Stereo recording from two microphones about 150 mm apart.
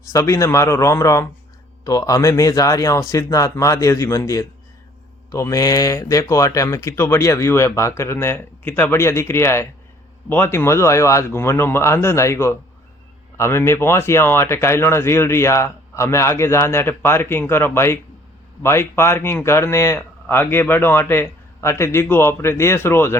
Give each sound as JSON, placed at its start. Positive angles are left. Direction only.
{"t": 0.1, "sound": "a man's voice", "side_deg": 20}